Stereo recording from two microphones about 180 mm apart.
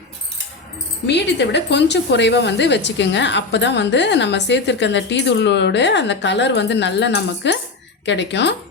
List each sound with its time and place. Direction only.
1.0 s a woman's voice: 70° left (ahead or behind)